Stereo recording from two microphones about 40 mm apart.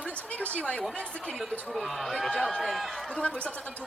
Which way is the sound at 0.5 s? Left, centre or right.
Left.